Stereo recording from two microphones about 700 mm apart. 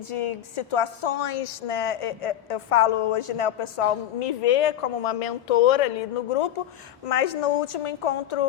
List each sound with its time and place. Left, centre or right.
0.1 s a woman's voice: left
7.0 s a woman's voice: left